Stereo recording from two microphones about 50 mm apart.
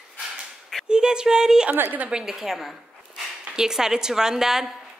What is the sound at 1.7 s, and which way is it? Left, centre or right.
Speech, right.